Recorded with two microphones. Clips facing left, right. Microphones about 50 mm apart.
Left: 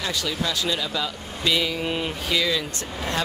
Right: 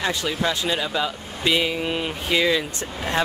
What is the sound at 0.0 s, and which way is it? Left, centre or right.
Speech, right.